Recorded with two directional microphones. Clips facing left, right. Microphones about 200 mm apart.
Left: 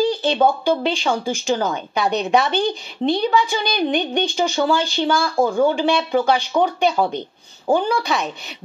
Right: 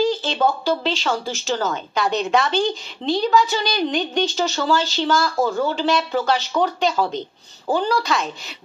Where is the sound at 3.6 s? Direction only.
60° left (ahead or behind).